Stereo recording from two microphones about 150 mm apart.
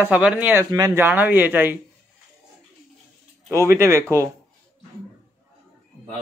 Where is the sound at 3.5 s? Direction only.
20° right (ahead or behind).